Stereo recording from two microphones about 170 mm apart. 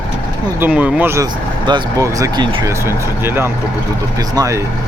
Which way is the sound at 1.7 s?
25° right (ahead or behind).